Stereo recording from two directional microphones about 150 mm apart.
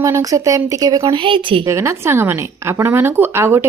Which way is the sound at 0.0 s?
20° right (ahead or behind).